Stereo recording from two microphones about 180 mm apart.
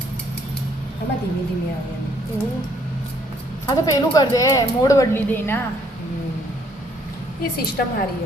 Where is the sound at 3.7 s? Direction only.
20° left (ahead or behind).